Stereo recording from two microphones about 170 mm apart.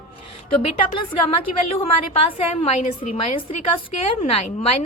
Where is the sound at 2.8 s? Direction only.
45° left (ahead or behind).